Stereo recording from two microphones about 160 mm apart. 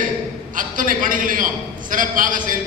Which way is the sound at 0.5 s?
55° right (ahead or behind).